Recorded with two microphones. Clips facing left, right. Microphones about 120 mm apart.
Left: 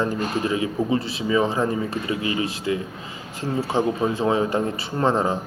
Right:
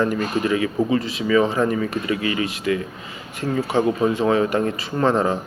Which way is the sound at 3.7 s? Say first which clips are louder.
Right 3 dB; centre (ahead or behind).